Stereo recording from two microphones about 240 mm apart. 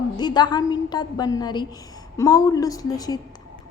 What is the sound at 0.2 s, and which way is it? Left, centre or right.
A woman's voice, centre.